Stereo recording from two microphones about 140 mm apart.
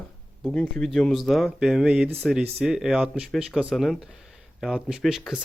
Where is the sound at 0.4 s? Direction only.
5° left (ahead or behind).